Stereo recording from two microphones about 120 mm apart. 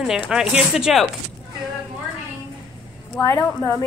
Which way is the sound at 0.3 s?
5° right (ahead or behind).